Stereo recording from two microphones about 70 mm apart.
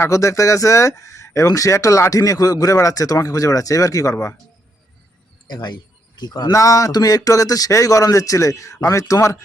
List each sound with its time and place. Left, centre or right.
0.0 s speech: left
5.5 s a man's voice: left
6.5 s speech: left